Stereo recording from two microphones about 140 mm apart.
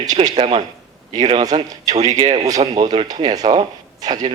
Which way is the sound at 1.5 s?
40° right (ahead or behind).